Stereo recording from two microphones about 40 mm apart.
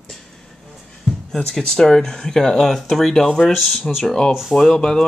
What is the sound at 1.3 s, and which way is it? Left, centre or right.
Speech, centre.